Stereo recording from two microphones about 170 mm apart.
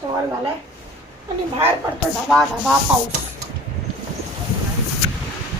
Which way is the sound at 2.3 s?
5° left (ahead or behind).